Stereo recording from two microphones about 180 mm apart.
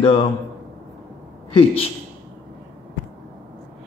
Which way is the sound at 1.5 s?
30° left (ahead or behind).